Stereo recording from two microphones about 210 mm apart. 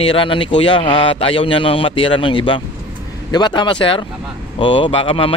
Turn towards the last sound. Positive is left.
turn(degrees=25)  # may be behind; listen again after turning